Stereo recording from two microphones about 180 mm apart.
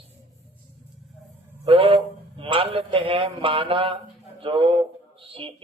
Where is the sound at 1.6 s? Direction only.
30° right (ahead or behind).